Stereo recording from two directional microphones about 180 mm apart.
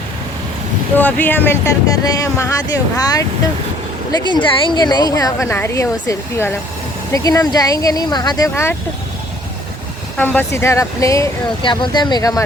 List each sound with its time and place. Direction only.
0.9 s speech: 10° left (ahead or behind)
4.3 s a woman's voice: 25° left (ahead or behind)
10.2 s speech: 10° left (ahead or behind)